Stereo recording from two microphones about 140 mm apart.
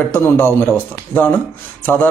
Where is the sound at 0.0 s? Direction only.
15° left (ahead or behind).